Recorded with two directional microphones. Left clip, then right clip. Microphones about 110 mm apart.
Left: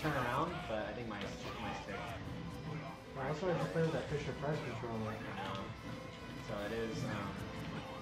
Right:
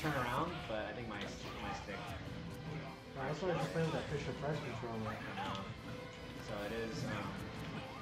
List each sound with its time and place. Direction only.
0.0 s music: centre (ahead or behind)
3.3 s speech: 5° right (ahead or behind)